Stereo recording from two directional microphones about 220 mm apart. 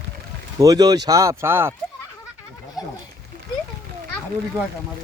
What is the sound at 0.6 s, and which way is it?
Speech, 15° right (ahead or behind).